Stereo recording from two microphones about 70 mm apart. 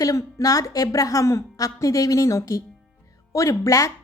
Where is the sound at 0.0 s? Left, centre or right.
Left.